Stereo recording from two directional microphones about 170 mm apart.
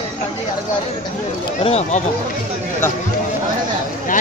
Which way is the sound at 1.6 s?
40° left (ahead or behind).